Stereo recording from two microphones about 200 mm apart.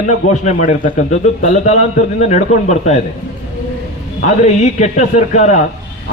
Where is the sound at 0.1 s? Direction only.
35° left (ahead or behind).